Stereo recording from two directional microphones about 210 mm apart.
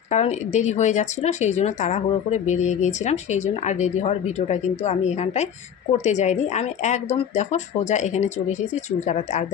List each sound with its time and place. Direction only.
0.1 s speech: 35° left (ahead or behind)